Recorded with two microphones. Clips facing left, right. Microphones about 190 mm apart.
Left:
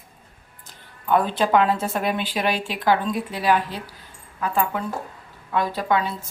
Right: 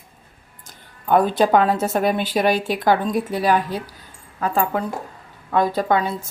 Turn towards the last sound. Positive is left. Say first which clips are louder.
# right 4 dB
turn(degrees=-45)  # may be behind; listen again after turning